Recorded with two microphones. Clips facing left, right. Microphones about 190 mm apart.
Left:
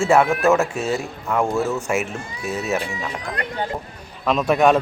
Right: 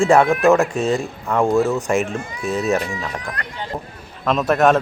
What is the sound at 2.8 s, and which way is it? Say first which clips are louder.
Speech: right 2 dB; 25° left (ahead or behind).